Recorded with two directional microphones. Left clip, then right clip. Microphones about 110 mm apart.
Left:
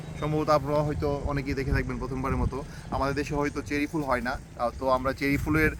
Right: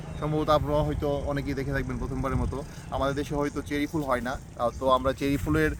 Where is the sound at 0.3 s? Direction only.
5° left (ahead or behind).